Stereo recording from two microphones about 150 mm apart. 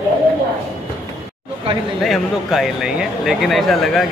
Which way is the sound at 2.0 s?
Centre (ahead or behind).